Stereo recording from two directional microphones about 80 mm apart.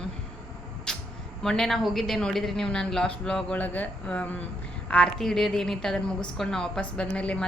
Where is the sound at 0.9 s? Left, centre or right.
Centre.